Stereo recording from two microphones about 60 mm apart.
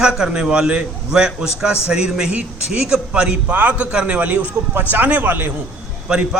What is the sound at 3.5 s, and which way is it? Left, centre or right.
A man's voice, right.